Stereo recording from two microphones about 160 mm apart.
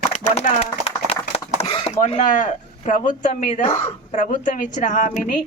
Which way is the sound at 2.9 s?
50° left (ahead or behind).